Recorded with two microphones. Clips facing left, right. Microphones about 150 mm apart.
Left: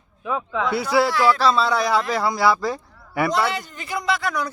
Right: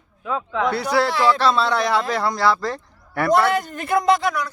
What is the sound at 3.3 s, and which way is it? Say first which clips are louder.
Speech: right 10 dB; 50° right (ahead or behind).